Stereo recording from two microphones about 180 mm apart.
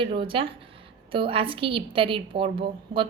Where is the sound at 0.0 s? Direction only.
30° right (ahead or behind).